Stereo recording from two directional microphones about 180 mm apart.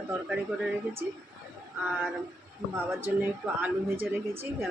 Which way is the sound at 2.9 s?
10° right (ahead or behind).